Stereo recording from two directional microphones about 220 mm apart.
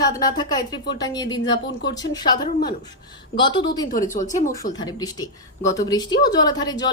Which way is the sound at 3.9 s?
35° left (ahead or behind).